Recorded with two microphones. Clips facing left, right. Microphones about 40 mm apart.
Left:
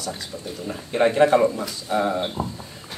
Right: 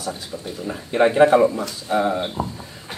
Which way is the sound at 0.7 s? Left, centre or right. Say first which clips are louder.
Right 2 dB; centre.